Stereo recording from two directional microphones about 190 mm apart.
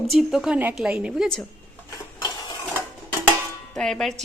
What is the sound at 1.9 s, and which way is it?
Dishes, 20° left (ahead or behind).